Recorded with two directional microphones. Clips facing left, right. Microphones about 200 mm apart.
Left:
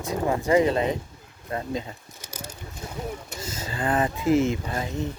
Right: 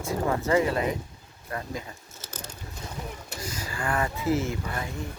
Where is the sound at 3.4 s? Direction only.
25° left (ahead or behind).